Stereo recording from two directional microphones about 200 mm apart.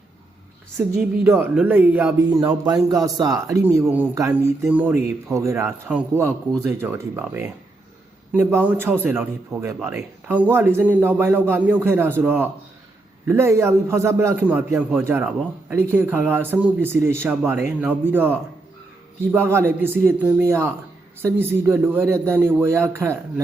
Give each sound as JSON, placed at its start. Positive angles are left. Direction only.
{"t": 0.8, "sound": "a man's voice", "side_deg": -10}